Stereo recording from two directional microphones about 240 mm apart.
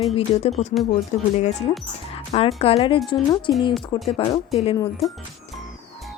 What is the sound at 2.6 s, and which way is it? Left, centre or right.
Speech, left.